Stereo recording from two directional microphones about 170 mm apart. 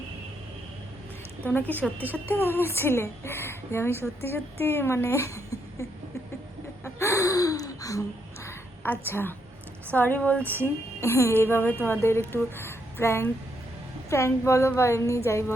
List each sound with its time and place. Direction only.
1.5 s a woman's voice: 10° left (ahead or behind)
6.8 s gasp: 15° left (ahead or behind)
8.4 s a sound: 10° left (ahead or behind)
9.9 s a woman's voice: 10° left (ahead or behind)